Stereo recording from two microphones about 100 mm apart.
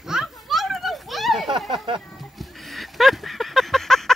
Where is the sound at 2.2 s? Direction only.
Centre (ahead or behind).